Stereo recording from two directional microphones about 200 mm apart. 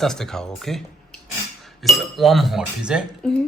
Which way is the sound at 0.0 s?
Centre (ahead or behind).